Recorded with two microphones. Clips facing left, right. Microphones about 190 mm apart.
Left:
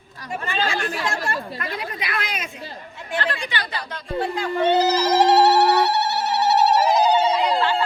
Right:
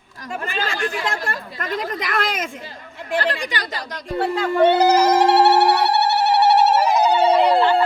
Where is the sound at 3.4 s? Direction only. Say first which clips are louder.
Right 2 dB; 40° right (ahead or behind).